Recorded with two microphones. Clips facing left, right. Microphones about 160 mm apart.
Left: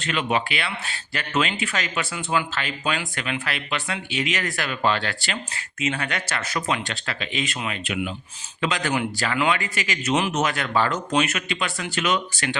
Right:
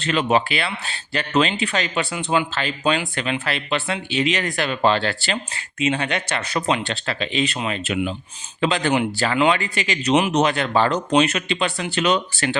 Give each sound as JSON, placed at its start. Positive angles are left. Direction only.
{"t": 0.1, "sound": "a man's voice", "side_deg": -35}